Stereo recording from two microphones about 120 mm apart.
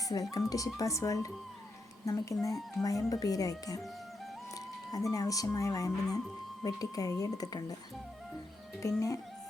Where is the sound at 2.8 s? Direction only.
25° left (ahead or behind).